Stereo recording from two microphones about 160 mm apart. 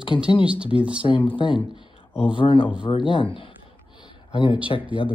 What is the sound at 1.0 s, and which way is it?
Speech, 30° left (ahead or behind).